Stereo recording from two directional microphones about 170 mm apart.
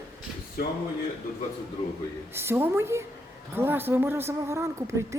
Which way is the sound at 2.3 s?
15° right (ahead or behind).